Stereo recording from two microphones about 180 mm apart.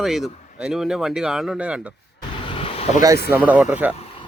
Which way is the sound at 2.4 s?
30° left (ahead or behind).